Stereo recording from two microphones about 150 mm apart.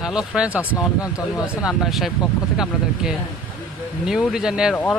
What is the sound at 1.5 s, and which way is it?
Speech, 5° right (ahead or behind).